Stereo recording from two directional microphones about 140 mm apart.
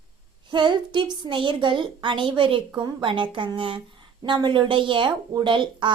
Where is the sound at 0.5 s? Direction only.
35° right (ahead or behind).